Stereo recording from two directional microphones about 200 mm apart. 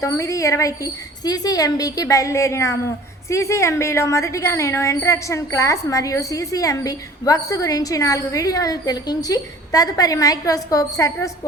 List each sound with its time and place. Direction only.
0.0 s a woman's voice: 15° left (ahead or behind)